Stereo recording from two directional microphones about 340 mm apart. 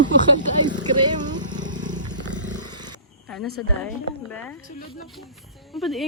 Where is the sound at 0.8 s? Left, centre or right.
Centre.